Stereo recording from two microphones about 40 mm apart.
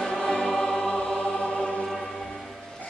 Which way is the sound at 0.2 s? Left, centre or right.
Centre.